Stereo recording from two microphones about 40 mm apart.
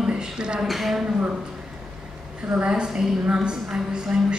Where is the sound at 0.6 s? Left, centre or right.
Centre.